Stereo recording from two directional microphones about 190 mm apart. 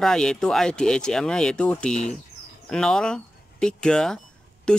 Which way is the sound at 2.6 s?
5° left (ahead or behind).